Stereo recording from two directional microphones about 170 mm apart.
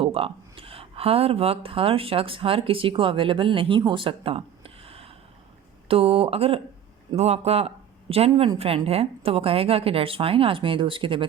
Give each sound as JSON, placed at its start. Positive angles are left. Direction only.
{"t": 0.0, "sound": "a woman's voice", "side_deg": -35}